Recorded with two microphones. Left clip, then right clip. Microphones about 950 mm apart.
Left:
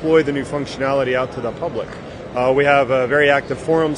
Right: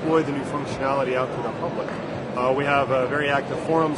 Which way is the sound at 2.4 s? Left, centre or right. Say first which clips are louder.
Left 7 dB; left.